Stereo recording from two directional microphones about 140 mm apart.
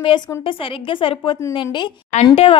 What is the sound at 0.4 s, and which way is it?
A woman's voice, 40° left (ahead or behind).